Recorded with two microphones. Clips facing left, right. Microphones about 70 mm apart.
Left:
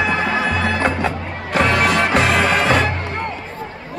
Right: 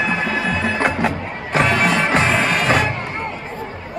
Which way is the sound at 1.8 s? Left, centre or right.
Centre.